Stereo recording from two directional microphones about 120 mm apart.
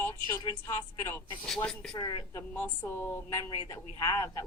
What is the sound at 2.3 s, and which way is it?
A woman's voice, 20° left (ahead or behind).